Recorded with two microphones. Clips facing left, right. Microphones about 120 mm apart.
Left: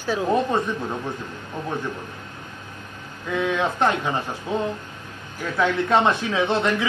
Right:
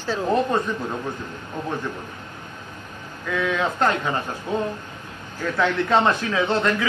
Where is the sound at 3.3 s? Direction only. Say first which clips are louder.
Left 1 dB; 20° left (ahead or behind).